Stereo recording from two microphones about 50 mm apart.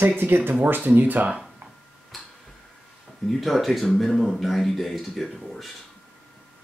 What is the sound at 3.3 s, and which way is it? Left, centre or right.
Speech, centre.